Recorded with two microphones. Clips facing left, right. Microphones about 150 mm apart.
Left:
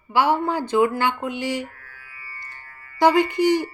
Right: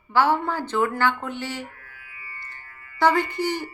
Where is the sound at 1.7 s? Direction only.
40° left (ahead or behind).